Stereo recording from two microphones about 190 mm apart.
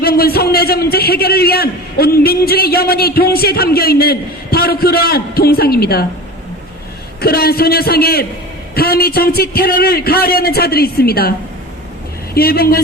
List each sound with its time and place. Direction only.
0.0 s a man's voice: 55° left (ahead or behind)
7.2 s a man's voice: 55° left (ahead or behind)